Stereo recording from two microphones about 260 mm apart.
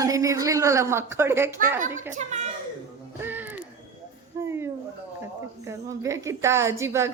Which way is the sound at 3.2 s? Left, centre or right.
Centre.